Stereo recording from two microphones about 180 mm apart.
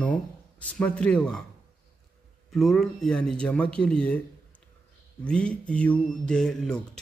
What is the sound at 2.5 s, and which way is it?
Speech, centre (ahead or behind).